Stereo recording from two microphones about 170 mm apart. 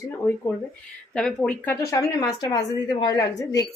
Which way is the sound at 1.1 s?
5° left (ahead or behind).